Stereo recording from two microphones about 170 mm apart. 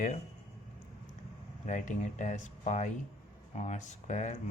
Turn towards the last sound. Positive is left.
turn(degrees=45)  # may be behind; listen again after turning